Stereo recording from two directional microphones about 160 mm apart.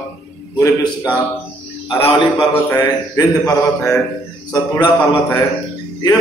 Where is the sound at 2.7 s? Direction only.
20° left (ahead or behind).